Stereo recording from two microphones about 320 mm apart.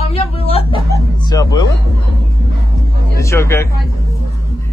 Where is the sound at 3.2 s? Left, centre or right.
Centre.